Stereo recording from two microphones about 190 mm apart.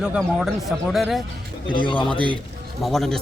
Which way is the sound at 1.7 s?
25° left (ahead or behind).